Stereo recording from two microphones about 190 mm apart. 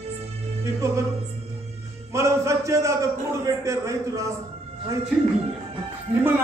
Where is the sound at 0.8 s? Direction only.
15° right (ahead or behind).